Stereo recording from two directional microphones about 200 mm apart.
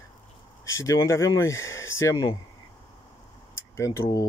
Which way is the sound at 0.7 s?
15° left (ahead or behind).